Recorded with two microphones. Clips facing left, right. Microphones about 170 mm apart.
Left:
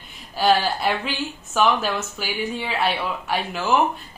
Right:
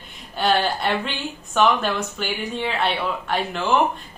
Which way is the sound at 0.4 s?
5° left (ahead or behind).